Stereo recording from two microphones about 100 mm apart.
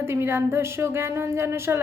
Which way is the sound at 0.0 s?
25° right (ahead or behind).